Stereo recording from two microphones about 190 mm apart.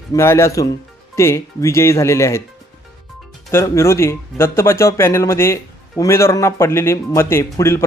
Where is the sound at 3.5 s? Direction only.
15° left (ahead or behind).